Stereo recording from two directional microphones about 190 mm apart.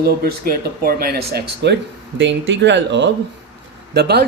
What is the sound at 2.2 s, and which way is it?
A woman's voice, 70° right (ahead or behind).